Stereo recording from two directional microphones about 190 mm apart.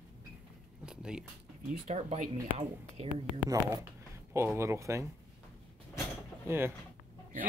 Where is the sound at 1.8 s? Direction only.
35° right (ahead or behind).